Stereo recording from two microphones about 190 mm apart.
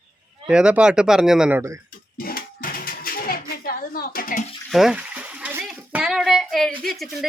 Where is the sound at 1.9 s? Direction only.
50° left (ahead or behind).